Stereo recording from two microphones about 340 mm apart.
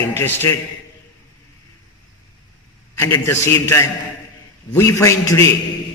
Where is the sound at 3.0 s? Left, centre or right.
Centre.